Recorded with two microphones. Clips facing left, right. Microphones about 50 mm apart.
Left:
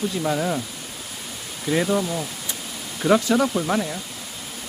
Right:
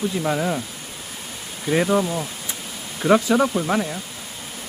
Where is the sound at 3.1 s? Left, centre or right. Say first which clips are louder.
Right 2 dB; centre.